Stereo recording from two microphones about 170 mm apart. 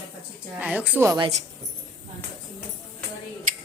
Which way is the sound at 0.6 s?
10° right (ahead or behind).